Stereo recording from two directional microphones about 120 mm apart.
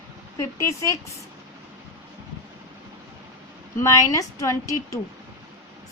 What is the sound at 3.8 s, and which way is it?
A woman's voice, 25° left (ahead or behind).